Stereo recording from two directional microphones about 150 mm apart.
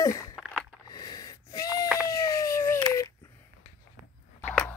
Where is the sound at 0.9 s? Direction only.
25° left (ahead or behind).